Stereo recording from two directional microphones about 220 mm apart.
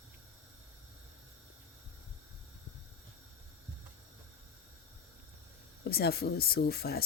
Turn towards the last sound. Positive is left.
turn(degrees=45)  # may be behind; listen again after turning